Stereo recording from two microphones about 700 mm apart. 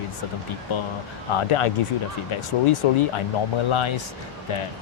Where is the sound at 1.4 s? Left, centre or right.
Left.